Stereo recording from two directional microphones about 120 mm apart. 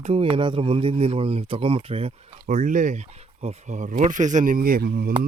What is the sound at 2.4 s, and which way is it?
Speech, 90° right.